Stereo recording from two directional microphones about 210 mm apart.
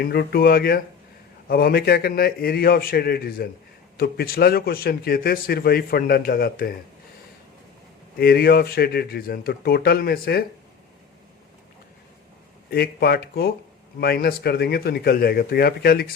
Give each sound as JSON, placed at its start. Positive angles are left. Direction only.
{"t": 0.0, "sound": "speech", "side_deg": 50}
{"t": 8.2, "sound": "speech", "side_deg": 45}
{"t": 12.7, "sound": "speech", "side_deg": 50}